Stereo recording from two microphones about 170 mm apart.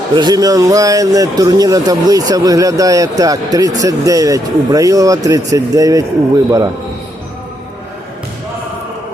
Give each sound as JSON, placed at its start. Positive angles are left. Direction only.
{"t": 0.1, "sound": "speech", "side_deg": -25}